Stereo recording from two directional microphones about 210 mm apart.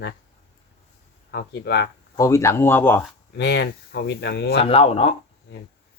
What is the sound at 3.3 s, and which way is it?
Speech, 55° left (ahead or behind).